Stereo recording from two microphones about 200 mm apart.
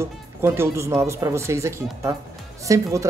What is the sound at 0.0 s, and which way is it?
Speech, 15° right (ahead or behind).